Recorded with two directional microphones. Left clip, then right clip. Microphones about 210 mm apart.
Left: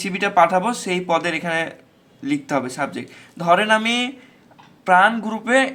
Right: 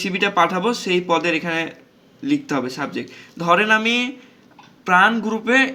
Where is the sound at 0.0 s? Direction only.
15° left (ahead or behind).